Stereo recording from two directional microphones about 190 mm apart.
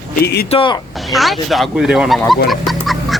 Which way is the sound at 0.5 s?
25° left (ahead or behind).